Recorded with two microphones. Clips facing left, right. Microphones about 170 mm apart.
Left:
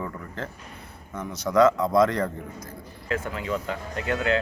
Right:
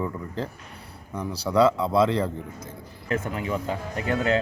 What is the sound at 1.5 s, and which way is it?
Speech, 30° right (ahead or behind).